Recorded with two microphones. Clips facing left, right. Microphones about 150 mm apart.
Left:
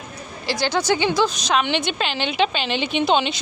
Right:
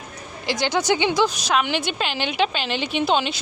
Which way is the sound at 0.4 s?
20° right (ahead or behind).